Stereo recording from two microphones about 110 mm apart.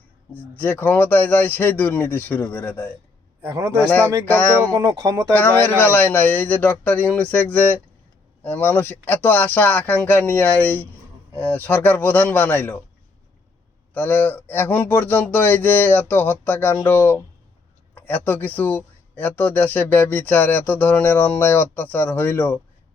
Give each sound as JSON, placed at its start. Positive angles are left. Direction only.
{"t": 0.5, "sound": "speech", "side_deg": 15}
{"t": 4.7, "sound": "speech", "side_deg": -35}
{"t": 5.3, "sound": "speech", "side_deg": 15}
{"t": 13.9, "sound": "speech", "side_deg": 15}
{"t": 17.9, "sound": "a sound", "side_deg": 15}
{"t": 18.3, "sound": "speech", "side_deg": 15}